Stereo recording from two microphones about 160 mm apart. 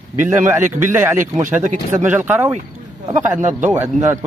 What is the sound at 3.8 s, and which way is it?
Speech, 15° right (ahead or behind).